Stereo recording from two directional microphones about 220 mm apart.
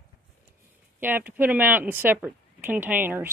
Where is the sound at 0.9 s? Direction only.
10° right (ahead or behind).